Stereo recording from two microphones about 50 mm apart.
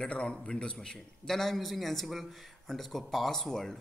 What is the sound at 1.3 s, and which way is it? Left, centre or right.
A man's voice, centre.